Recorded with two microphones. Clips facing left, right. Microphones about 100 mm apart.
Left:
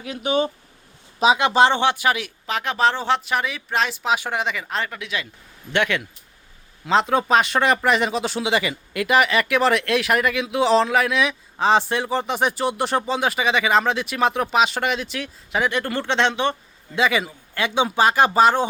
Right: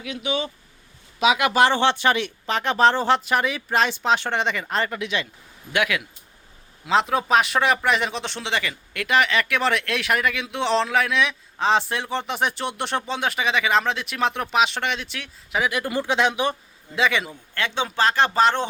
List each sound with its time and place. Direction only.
0.0 s speech: 40° left (ahead or behind)
1.2 s speech: 30° left (ahead or behind); by 18.7 s 5° left (ahead or behind)